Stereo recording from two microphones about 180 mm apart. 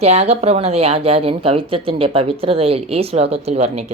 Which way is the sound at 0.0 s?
35° right (ahead or behind).